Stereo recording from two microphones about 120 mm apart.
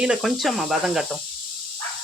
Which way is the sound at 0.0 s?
5° right (ahead or behind).